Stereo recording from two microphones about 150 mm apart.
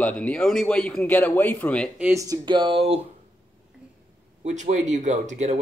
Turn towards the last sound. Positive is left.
turn(degrees=-50)  # may be behind; listen again after turning